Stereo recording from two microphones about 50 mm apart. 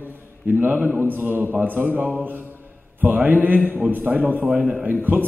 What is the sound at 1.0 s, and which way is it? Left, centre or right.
A man's voice, right.